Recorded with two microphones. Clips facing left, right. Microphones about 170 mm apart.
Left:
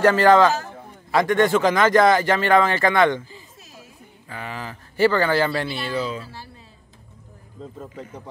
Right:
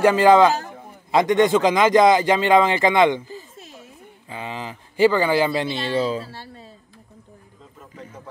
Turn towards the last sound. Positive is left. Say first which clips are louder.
# right 4 dB
turn(degrees=-35)  # may be behind; listen again after turning